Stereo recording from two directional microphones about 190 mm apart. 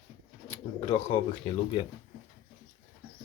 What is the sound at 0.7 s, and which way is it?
Speech, 30° left (ahead or behind).